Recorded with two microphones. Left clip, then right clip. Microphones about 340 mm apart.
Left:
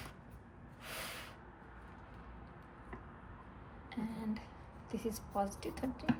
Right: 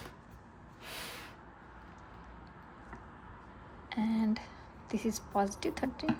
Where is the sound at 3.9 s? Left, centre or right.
Right.